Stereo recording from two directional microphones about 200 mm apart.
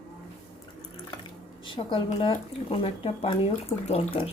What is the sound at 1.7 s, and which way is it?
Speech, 25° left (ahead or behind).